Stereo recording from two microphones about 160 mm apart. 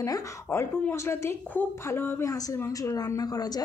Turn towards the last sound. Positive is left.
turn(degrees=25)  # may be behind; listen again after turning